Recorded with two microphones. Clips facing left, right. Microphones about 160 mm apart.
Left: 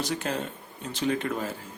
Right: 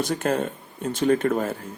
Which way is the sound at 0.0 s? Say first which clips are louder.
Right 6 dB; 50° right (ahead or behind).